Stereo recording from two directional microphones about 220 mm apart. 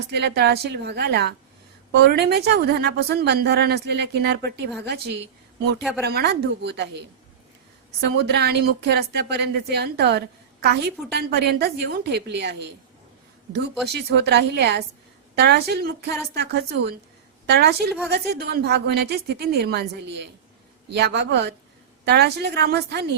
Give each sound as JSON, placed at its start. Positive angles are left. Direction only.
{"t": 0.1, "sound": "a woman's voice", "side_deg": -50}
{"t": 8.1, "sound": "a woman's voice", "side_deg": -50}
{"t": 13.9, "sound": "a woman's voice", "side_deg": -50}